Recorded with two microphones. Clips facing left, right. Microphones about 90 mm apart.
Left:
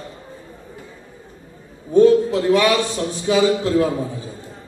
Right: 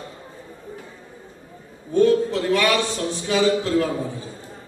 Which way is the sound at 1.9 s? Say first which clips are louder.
Left 5 dB; 15° left (ahead or behind).